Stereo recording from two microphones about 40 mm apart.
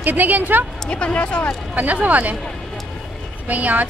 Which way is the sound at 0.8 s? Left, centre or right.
Left.